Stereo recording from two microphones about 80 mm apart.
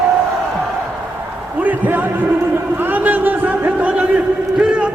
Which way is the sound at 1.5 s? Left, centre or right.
Right.